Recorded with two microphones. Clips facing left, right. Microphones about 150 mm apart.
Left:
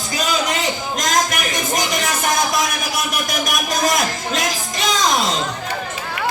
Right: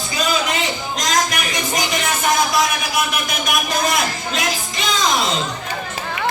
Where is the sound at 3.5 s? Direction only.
45° left (ahead or behind).